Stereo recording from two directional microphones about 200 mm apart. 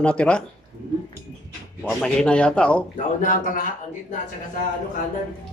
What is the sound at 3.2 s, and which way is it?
Speech, 40° left (ahead or behind).